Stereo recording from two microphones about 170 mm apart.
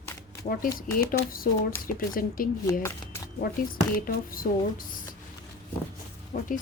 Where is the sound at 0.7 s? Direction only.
55° left (ahead or behind).